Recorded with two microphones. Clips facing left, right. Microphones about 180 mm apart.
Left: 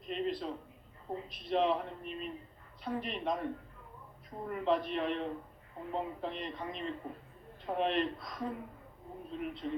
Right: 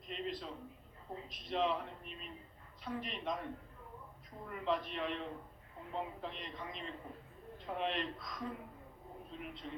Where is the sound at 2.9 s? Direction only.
55° left (ahead or behind).